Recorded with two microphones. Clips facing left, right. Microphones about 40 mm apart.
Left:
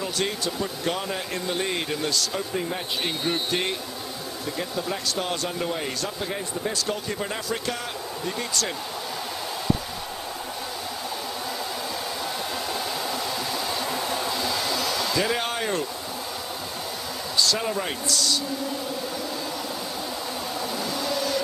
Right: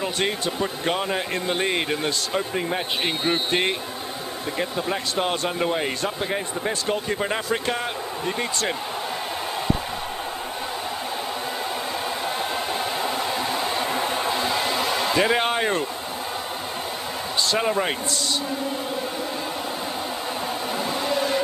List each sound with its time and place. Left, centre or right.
0.0 s speech: right
12.7 s a sound: right
17.4 s speech: right
21.0 s vehicle: right